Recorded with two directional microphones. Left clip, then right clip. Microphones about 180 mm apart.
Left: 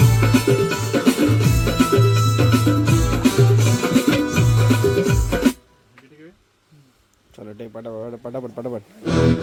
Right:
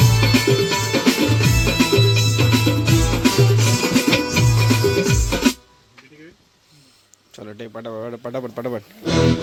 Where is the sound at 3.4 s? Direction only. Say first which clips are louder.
Right 1 dB; centre (ahead or behind).